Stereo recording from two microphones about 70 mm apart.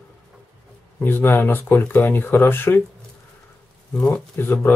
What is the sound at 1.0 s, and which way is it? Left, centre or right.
Speech, left.